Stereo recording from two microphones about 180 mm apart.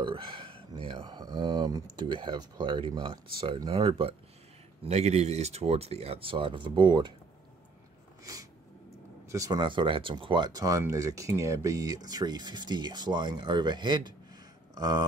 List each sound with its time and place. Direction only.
0.0 s speech: 30° right (ahead or behind)
8.2 s a sound: 20° right (ahead or behind)
9.3 s speech: 20° right (ahead or behind)